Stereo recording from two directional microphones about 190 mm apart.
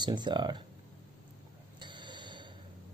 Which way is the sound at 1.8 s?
25° right (ahead or behind).